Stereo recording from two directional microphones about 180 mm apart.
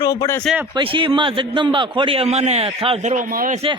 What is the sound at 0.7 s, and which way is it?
A man's voice, 30° right (ahead or behind).